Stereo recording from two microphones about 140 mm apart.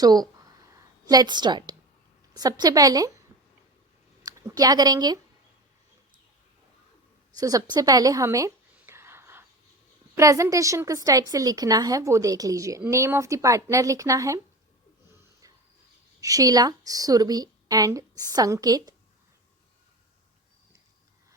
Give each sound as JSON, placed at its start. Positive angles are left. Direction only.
{"t": 0.0, "sound": "a woman's voice", "side_deg": -30}
{"t": 4.3, "sound": "speech", "side_deg": -25}
{"t": 7.3, "sound": "a sound", "side_deg": -25}
{"t": 10.2, "sound": "a woman's voice", "side_deg": -20}
{"t": 15.1, "sound": "a sound", "side_deg": -20}
{"t": 16.2, "sound": "a woman's voice", "side_deg": -25}